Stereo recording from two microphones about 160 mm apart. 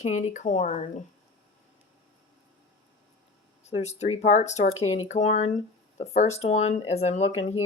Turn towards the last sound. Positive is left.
turn(degrees=40)  # may be behind; listen again after turning